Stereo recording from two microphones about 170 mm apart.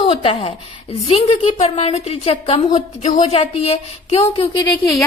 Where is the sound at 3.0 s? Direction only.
40° left (ahead or behind).